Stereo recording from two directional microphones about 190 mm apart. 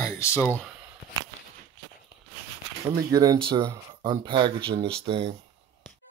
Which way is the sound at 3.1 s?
20° right (ahead or behind).